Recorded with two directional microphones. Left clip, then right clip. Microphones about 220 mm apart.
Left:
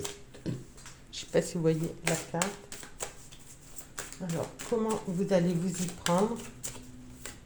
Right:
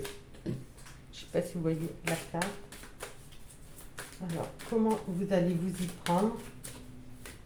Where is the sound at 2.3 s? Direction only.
40° left (ahead or behind).